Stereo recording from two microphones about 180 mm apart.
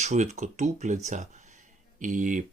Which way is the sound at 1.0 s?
40° right (ahead or behind).